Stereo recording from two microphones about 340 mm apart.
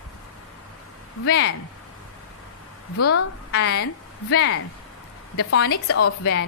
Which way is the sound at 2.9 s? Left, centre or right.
Left.